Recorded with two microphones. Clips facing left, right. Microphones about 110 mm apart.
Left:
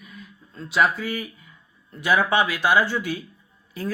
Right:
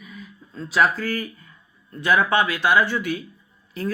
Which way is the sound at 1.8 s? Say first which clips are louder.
Right 1 dB; 15° left (ahead or behind).